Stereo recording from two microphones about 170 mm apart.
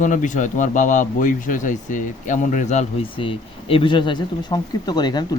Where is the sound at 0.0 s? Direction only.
45° left (ahead or behind).